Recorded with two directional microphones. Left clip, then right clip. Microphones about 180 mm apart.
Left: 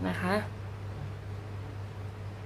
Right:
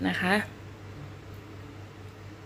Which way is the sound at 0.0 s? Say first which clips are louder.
Right 5 dB; 25° right (ahead or behind).